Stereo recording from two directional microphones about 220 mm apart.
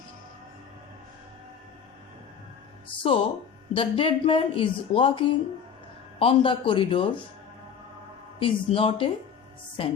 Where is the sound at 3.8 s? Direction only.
25° left (ahead or behind).